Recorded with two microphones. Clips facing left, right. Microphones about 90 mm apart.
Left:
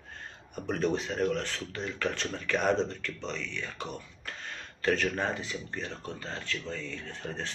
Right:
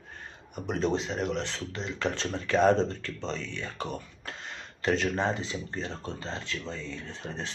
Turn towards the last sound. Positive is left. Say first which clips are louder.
# even
turn(degrees=-20)  # may be behind; listen again after turning